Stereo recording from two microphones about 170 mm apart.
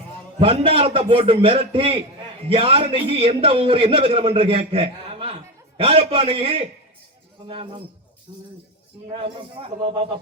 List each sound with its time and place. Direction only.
0.3 s a man's voice: 35° right (ahead or behind)